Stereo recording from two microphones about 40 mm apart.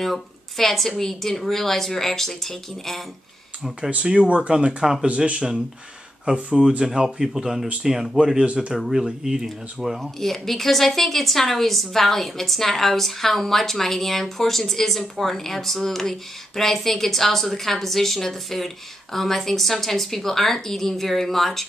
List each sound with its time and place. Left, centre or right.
0.0 s speech: centre
4.0 s speech: right
8.7 s speech: centre
9.9 s speech: centre